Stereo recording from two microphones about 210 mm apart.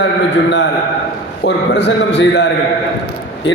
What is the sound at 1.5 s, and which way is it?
A man's voice, 55° left (ahead or behind).